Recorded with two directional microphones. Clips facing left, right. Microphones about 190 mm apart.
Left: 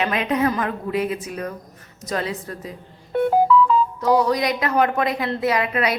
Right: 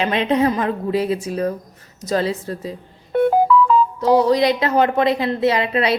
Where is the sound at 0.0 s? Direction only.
30° right (ahead or behind).